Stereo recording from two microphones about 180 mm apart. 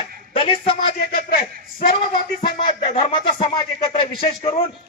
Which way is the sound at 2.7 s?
30° left (ahead or behind).